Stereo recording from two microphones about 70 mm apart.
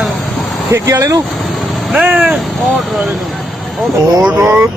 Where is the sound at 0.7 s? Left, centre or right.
Right.